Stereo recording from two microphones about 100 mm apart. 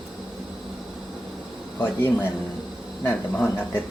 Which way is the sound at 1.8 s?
20° left (ahead or behind).